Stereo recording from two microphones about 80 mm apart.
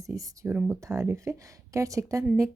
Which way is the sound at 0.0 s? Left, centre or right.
Right.